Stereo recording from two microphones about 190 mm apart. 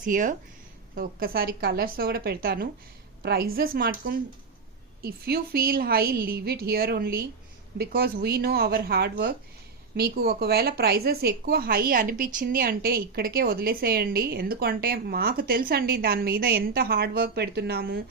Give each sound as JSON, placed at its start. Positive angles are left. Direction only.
{"t": 0.0, "sound": "a woman's voice", "side_deg": -45}